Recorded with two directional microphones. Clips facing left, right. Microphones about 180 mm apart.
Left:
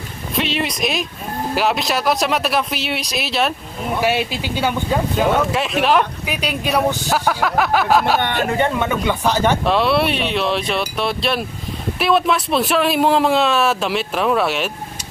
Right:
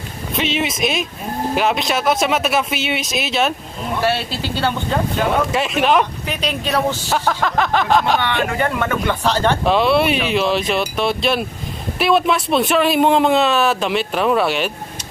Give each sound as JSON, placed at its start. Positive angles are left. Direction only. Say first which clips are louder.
{"t": 0.4, "sound": "speech", "louder": "right 1 dB", "side_deg": 0}
{"t": 4.0, "sound": "speech", "louder": "even", "side_deg": 15}
{"t": 8.5, "sound": "speech", "louder": "left 1 dB", "side_deg": 25}
{"t": 9.7, "sound": "speech", "louder": "right 2 dB", "side_deg": 0}